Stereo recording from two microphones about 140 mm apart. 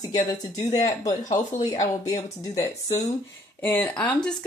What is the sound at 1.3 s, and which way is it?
Speech, 60° left (ahead or behind).